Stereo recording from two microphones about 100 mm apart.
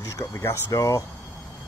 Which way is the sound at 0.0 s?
25° left (ahead or behind).